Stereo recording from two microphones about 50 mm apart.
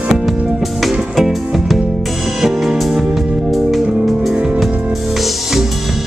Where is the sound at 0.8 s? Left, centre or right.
Centre.